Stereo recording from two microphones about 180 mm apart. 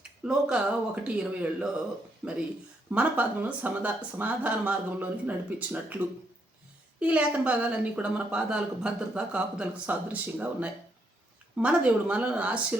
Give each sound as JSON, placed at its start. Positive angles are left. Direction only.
{"t": 0.0, "sound": "speech", "side_deg": -5}